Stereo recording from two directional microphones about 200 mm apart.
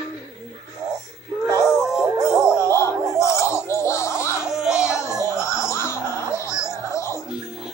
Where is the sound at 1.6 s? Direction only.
5° right (ahead or behind).